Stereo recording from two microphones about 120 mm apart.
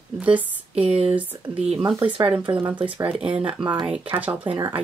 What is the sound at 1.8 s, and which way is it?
Speech, 50° right (ahead or behind).